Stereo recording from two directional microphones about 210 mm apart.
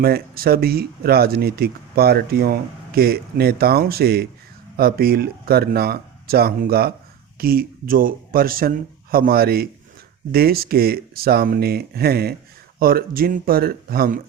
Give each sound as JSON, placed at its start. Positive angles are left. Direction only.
{"t": 0.0, "sound": "speech", "side_deg": -45}